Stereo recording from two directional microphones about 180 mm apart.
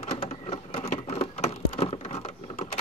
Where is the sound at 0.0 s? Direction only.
35° left (ahead or behind).